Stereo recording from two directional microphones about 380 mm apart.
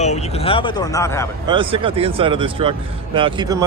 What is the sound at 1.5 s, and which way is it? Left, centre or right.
Speech, centre.